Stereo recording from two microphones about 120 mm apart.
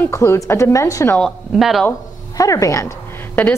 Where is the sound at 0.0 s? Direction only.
25° left (ahead or behind).